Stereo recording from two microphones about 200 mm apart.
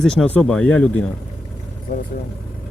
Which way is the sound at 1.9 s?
40° left (ahead or behind).